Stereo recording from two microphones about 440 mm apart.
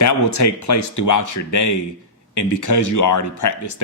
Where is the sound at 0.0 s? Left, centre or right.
Left.